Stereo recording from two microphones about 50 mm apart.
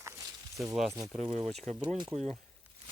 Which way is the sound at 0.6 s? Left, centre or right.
Centre.